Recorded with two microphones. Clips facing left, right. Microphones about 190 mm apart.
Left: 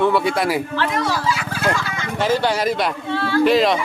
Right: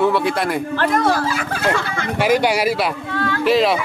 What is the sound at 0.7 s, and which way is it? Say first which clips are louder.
Speech: right 4 dB; 50° right (ahead or behind).